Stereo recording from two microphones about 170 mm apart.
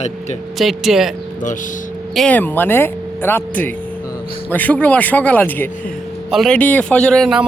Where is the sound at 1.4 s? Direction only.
50° left (ahead or behind).